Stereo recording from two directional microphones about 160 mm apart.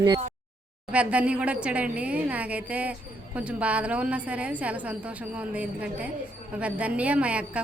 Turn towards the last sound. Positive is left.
turn(degrees=-5)  # may be behind; listen again after turning